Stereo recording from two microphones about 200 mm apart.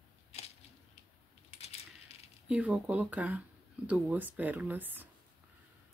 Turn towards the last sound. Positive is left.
turn(degrees=-10)  # may be behind; listen again after turning